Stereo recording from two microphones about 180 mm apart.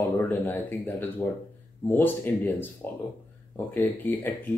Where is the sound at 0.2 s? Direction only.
10° left (ahead or behind).